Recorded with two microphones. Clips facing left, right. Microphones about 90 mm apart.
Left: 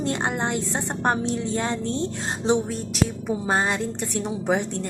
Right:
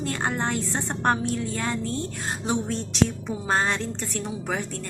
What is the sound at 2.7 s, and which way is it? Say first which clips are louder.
A woman's voice: right 1 dB; 10° left (ahead or behind).